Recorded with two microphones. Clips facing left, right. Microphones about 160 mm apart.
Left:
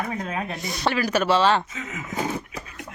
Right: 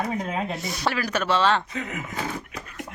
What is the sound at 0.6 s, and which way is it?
A man's voice, 5° right (ahead or behind).